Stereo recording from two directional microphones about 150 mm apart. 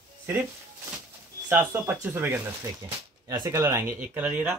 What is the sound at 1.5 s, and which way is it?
Speech, 15° right (ahead or behind).